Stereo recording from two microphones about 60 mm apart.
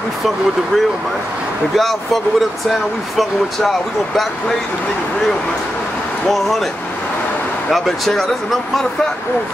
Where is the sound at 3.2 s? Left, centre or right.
Centre.